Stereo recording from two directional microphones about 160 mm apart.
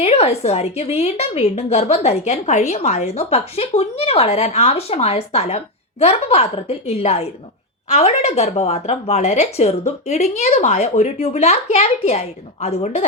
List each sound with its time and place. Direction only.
0.0 s a woman's voice: 40° left (ahead or behind)